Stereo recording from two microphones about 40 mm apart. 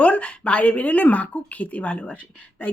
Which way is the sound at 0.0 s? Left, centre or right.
Left.